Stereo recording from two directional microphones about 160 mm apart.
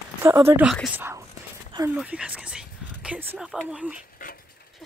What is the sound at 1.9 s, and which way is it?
Speech, 5° right (ahead or behind).